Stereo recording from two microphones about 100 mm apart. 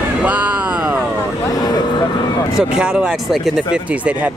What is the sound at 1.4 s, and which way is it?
Vehicle, 40° left (ahead or behind).